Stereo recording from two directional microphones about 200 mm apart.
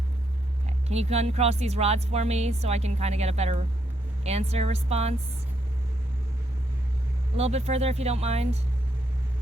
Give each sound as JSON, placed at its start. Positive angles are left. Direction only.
{"t": 0.9, "sound": "speech", "side_deg": -30}
{"t": 7.3, "sound": "speech", "side_deg": -30}